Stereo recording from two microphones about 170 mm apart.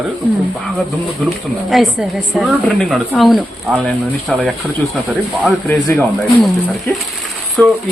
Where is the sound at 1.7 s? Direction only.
Centre (ahead or behind).